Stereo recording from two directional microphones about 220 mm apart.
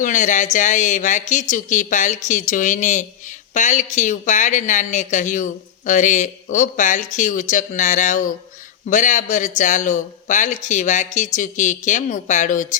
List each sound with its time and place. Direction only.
0.0 s speech: 35° left (ahead or behind)